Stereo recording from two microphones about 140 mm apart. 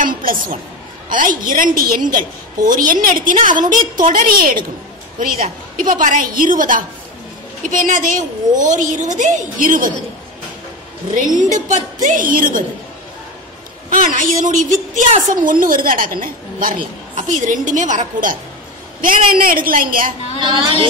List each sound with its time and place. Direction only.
0.0 s a sound: 90° right
1.0 s a woman's voice: 75° right (ahead or behind)
11.3 s a woman's voice: 60° right (ahead or behind); by 12.6 s 80° right
13.8 s a woman's voice: 75° right (ahead or behind)
17.1 s a woman's voice: 60° right (ahead or behind)
18.9 s a woman's voice: 75° right (ahead or behind)
20.3 s a woman's voice: 35° right (ahead or behind)